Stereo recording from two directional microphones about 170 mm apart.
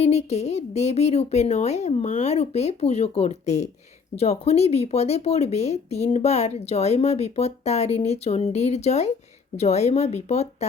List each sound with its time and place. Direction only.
0.0 s speech: 40° left (ahead or behind)